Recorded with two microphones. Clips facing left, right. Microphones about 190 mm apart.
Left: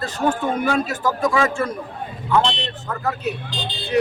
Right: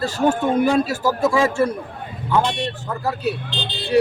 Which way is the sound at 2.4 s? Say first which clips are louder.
Even; 10° right (ahead or behind).